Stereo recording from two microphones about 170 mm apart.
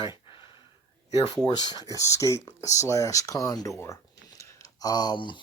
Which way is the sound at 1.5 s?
25° left (ahead or behind).